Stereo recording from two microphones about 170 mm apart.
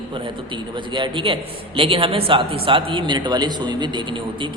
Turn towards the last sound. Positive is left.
turn(degrees=-25)  # may be behind; listen again after turning